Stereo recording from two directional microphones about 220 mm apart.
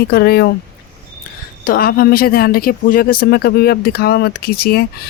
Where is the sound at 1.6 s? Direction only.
40° left (ahead or behind).